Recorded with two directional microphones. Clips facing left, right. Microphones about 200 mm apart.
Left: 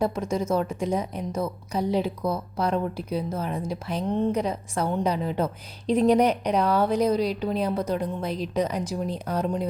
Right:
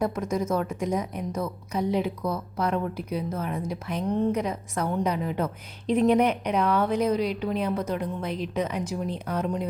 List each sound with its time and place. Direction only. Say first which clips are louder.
0.0 s a woman's voice: left 1 dB; 30° left (ahead or behind)